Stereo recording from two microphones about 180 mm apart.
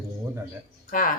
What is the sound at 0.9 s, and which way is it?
Speech, 50° left (ahead or behind).